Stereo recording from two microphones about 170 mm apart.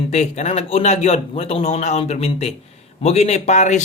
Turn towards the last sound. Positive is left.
turn(degrees=45)  # may be behind; listen again after turning